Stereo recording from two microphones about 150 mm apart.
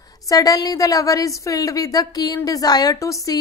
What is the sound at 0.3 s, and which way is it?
A woman's voice, 25° left (ahead or behind).